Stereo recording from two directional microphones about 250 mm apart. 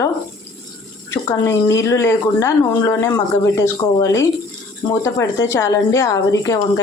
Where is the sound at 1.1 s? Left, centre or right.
Centre.